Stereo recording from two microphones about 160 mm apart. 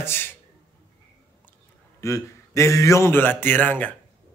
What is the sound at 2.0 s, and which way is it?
Speech, 20° left (ahead or behind).